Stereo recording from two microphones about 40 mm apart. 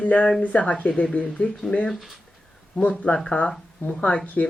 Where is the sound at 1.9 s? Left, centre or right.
Centre.